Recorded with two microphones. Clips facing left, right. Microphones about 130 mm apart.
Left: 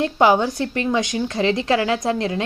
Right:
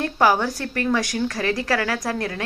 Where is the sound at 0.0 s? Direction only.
20° left (ahead or behind).